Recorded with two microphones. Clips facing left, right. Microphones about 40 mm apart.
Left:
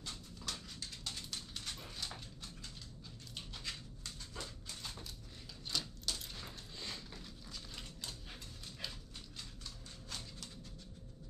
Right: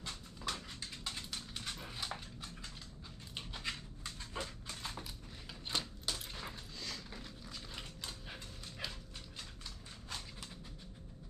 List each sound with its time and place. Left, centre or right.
0.0 s dog: right
5.5 s coin: right
7.1 s dog: centre
10.0 s horse: centre